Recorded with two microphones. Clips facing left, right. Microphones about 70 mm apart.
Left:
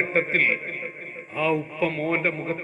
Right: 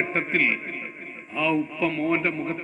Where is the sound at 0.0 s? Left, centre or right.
Left.